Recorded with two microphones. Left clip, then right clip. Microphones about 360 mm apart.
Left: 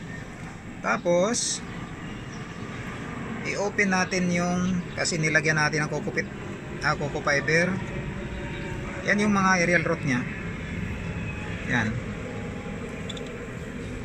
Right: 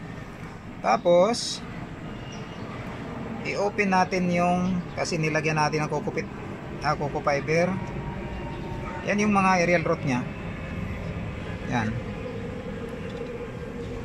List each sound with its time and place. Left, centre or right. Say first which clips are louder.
0.8 s speech: right 4 dB; centre
3.4 s speech: even; centre
9.0 s speech: even; centre